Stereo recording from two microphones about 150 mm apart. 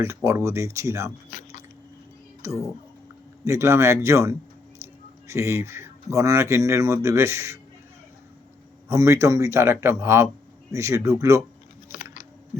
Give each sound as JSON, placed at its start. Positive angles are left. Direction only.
{"t": 0.0, "sound": "speech", "side_deg": -15}
{"t": 1.3, "sound": "biting", "side_deg": 50}
{"t": 2.4, "sound": "speech", "side_deg": -20}
{"t": 8.9, "sound": "speech", "side_deg": -20}